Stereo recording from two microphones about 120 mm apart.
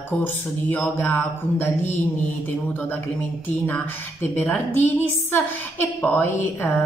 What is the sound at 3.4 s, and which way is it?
Speech, 15° left (ahead or behind).